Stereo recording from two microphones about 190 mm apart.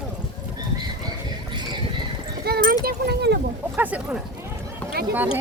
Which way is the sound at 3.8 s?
10° right (ahead or behind).